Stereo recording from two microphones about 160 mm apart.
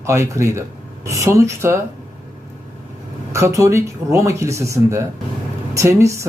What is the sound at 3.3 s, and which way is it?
Speech, 20° right (ahead or behind).